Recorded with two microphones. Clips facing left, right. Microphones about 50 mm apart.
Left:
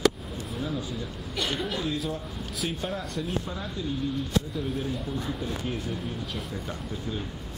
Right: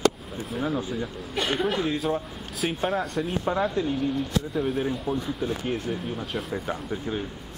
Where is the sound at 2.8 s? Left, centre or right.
Centre.